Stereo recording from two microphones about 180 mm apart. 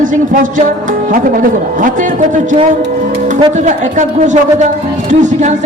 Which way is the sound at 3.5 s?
40° right (ahead or behind).